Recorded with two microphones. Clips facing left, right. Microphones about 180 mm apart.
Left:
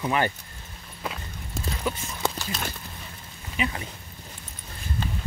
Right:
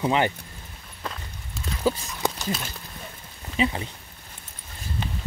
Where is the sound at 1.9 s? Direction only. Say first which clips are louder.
Right 7 dB; 30° right (ahead or behind).